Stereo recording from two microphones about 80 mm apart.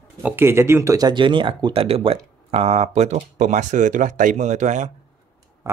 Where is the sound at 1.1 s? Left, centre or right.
Right.